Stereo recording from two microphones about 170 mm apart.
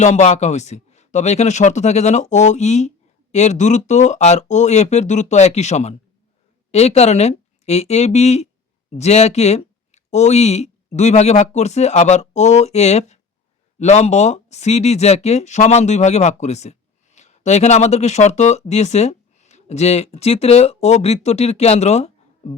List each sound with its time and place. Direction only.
0.0 s speech: 40° left (ahead or behind)